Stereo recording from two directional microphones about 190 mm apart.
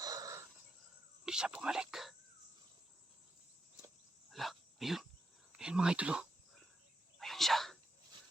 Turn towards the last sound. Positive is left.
turn(degrees=0)  # may be behind; listen again after turning